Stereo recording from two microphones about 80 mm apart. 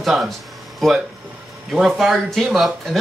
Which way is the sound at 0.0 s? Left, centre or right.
Centre.